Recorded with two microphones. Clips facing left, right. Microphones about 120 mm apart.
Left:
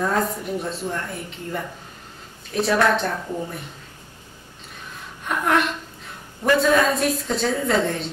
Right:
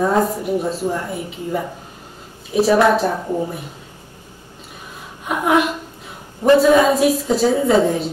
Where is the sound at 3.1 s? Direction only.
20° right (ahead or behind).